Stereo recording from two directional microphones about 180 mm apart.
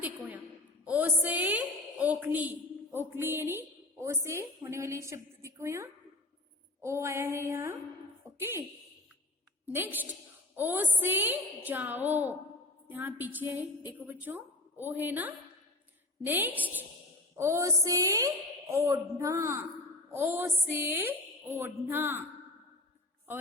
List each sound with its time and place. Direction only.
0.9 s a woman's voice: 10° right (ahead or behind)
9.6 s a woman's voice: 10° right (ahead or behind)